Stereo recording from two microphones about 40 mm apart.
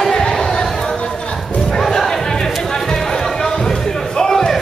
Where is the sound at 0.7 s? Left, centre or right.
Centre.